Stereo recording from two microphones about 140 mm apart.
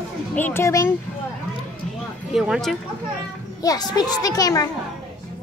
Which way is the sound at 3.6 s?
25° left (ahead or behind).